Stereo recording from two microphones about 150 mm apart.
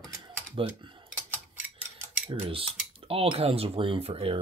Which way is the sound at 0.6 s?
35° right (ahead or behind).